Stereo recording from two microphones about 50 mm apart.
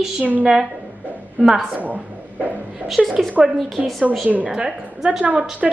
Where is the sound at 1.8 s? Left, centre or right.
Right.